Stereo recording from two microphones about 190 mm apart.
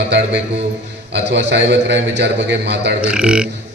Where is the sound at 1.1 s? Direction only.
65° right (ahead or behind).